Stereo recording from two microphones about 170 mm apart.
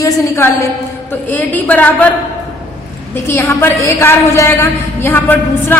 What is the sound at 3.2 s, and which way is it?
A woman's voice, 15° left (ahead or behind).